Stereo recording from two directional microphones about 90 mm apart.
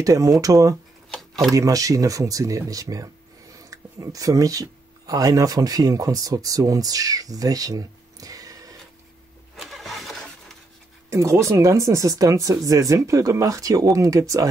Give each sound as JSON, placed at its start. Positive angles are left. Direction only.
{"t": 0.0, "sound": "speech", "side_deg": -40}
{"t": 9.6, "sound": "vehicle", "side_deg": 0}
{"t": 11.1, "sound": "speech", "side_deg": -30}